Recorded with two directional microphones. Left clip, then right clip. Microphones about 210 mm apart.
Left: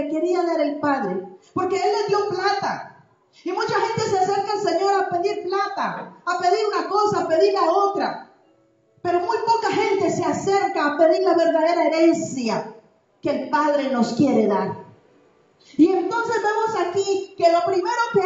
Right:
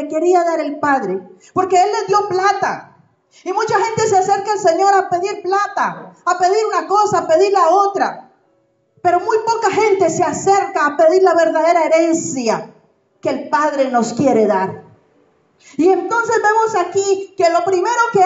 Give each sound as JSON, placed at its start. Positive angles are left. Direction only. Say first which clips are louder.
{"t": 0.1, "sound": "speech", "louder": "right 10 dB", "side_deg": -50}
{"t": 15.6, "sound": "speech", "louder": "right 4 dB", "side_deg": -50}